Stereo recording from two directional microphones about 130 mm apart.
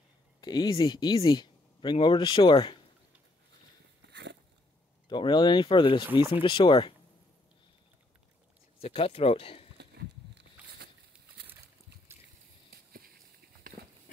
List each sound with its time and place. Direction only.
0.4 s speech: 35° left (ahead or behind)
5.0 s speech: 35° left (ahead or behind)
8.8 s speech: 45° left (ahead or behind)
13.7 s horse: 90° right